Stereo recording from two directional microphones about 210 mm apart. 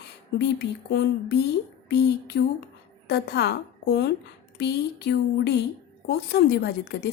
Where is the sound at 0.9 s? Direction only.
50° left (ahead or behind).